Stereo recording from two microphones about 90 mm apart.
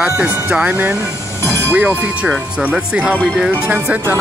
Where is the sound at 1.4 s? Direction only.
30° left (ahead or behind).